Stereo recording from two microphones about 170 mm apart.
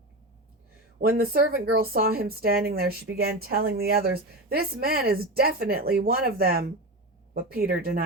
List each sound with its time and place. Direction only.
0.9 s speech: 60° right (ahead or behind)